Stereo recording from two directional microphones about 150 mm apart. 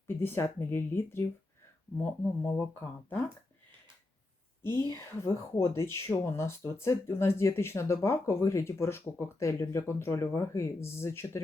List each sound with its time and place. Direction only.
0.2 s speech: 15° left (ahead or behind)
4.6 s speech: 15° left (ahead or behind)